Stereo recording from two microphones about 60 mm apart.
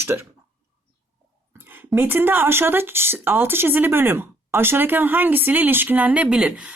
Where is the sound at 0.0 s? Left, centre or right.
Right.